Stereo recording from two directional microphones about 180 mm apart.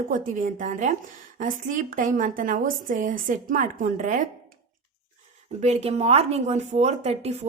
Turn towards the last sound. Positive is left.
turn(degrees=-35)  # may be behind; listen again after turning